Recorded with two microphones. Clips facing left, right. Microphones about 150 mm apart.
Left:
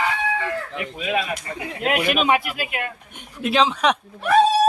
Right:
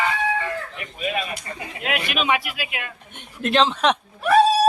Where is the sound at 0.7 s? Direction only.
90° left.